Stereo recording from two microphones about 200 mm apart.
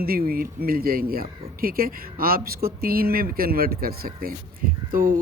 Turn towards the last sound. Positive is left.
turn(degrees=-45)  # may be behind; listen again after turning